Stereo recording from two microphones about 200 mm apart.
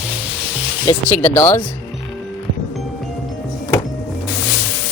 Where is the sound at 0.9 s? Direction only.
10° left (ahead or behind).